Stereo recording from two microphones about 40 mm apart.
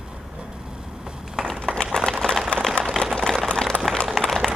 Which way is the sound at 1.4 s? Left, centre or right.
Centre.